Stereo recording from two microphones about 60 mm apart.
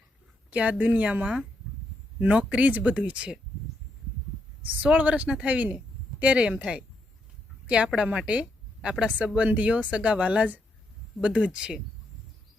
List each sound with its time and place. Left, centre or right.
0.5 s speech: right
4.6 s speech: right
7.9 s speech: centre